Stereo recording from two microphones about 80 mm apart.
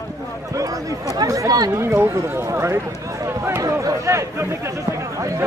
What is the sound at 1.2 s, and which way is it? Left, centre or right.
Speech, right.